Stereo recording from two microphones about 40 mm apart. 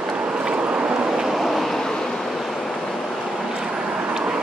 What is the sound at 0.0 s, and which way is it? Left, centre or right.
Vehicle, centre.